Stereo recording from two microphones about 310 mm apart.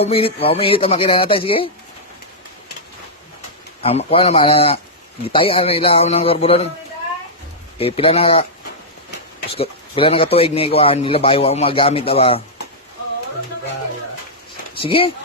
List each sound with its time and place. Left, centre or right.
0.0 s speech: centre
3.8 s a man's voice: centre
7.8 s a man's voice: centre
9.6 s a man's voice: centre
14.8 s speech: centre